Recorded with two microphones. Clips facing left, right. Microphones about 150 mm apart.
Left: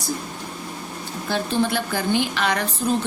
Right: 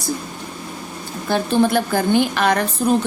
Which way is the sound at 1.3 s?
50° right (ahead or behind).